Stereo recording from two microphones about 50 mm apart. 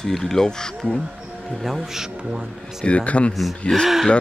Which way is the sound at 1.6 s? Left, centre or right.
Centre.